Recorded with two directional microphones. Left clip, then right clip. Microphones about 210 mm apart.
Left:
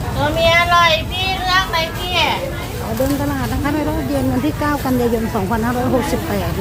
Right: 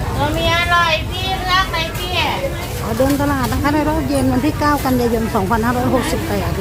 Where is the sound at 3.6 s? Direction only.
10° right (ahead or behind).